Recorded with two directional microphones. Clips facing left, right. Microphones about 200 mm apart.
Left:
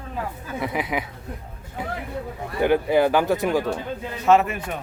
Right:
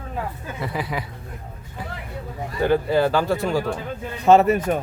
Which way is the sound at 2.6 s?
15° left (ahead or behind).